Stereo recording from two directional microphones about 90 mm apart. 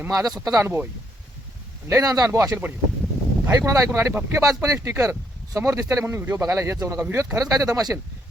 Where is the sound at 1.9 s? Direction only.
40° right (ahead or behind).